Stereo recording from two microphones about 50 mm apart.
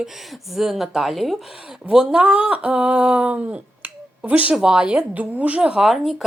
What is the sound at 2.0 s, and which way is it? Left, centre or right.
Speech, right.